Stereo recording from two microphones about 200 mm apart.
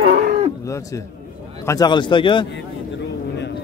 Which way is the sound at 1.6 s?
20° left (ahead or behind).